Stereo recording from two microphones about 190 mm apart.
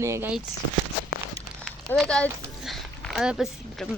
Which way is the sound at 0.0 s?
15° right (ahead or behind).